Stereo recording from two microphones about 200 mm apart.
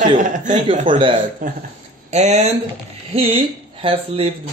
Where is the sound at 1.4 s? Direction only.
40° right (ahead or behind).